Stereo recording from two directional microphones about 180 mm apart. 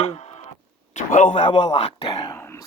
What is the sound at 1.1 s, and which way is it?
Speech, 50° left (ahead or behind).